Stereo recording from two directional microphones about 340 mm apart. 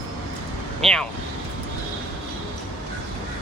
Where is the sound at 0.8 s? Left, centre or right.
Centre.